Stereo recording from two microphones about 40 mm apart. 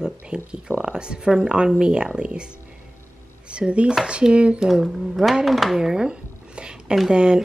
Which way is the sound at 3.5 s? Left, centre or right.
Right.